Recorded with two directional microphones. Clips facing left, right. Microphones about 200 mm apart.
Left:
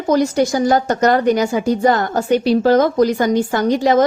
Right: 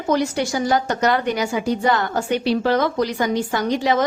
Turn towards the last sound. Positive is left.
turn(degrees=45)  # may be behind; listen again after turning